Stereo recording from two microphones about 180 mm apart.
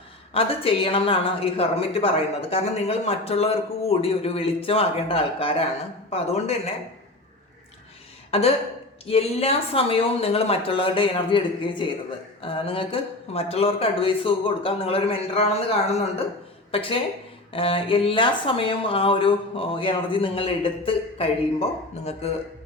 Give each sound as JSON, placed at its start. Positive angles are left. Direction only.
{"t": 0.3, "sound": "speech", "side_deg": 30}
{"t": 8.3, "sound": "a sound", "side_deg": 35}
{"t": 9.0, "sound": "speech", "side_deg": 35}
{"t": 16.7, "sound": "speech", "side_deg": 30}